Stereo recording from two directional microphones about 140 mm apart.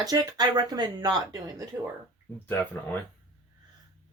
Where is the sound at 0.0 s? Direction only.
25° right (ahead or behind).